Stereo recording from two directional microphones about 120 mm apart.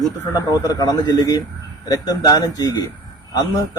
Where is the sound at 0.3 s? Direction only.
30° left (ahead or behind).